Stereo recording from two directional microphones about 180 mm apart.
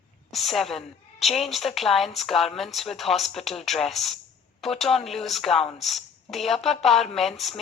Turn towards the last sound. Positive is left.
turn(degrees=0)  # may be behind; listen again after turning